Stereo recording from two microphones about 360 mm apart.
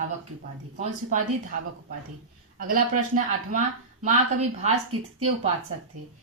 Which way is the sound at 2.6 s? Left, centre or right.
Right.